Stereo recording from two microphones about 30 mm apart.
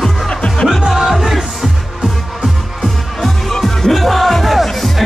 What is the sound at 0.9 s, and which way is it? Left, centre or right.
Speech, centre.